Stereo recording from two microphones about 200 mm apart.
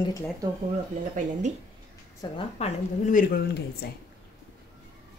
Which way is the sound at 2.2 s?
20° left (ahead or behind).